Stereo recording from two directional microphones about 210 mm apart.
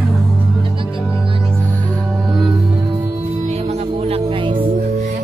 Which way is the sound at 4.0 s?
25° right (ahead or behind).